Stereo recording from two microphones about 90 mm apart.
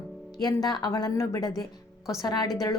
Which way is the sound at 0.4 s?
50° left (ahead or behind).